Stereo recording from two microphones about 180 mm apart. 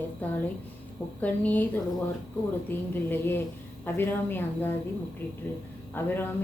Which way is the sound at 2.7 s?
10° left (ahead or behind).